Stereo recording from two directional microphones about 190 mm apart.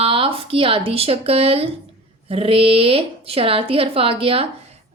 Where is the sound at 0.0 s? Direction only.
30° right (ahead or behind).